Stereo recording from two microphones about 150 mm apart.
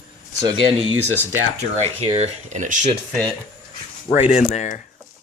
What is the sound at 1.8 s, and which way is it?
Speech, 45° right (ahead or behind).